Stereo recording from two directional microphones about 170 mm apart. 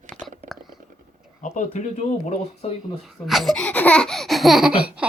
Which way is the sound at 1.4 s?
45° left (ahead or behind).